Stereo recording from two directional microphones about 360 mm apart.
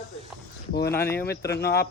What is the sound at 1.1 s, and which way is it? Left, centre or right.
Speech, left.